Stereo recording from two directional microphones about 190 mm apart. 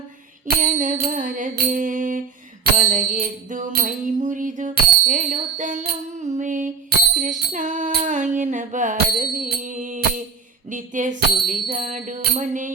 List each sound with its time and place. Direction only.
0.4 s music: 40° right (ahead or behind)